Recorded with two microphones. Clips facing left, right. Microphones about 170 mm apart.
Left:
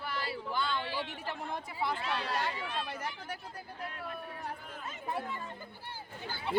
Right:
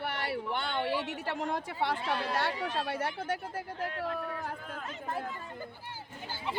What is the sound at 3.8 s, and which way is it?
Speech, 90° right.